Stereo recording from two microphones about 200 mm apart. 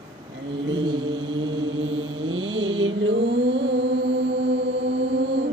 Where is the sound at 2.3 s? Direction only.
75° right (ahead or behind).